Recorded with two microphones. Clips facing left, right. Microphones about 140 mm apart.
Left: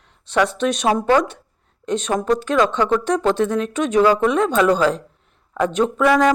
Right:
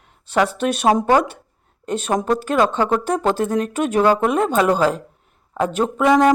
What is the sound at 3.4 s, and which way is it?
Speech, 45° right (ahead or behind).